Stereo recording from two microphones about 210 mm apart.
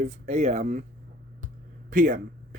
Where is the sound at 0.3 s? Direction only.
35° right (ahead or behind).